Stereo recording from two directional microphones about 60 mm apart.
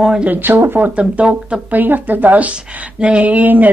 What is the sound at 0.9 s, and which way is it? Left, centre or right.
Speech, right.